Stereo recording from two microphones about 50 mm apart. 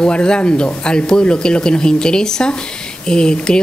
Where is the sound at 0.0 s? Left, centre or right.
Centre.